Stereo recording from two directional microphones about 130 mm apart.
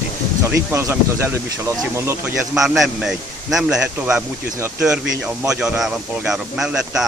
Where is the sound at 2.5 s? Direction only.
5° right (ahead or behind).